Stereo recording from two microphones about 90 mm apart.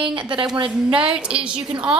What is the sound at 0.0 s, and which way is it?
Speech, 65° right (ahead or behind).